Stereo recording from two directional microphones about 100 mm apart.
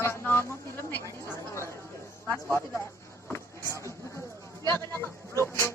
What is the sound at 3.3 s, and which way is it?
Vehicle, 25° left (ahead or behind).